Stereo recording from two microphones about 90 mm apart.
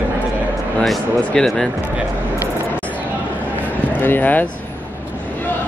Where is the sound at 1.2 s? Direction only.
10° left (ahead or behind).